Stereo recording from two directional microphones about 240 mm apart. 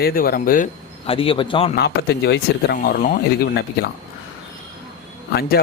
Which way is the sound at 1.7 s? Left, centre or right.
Left.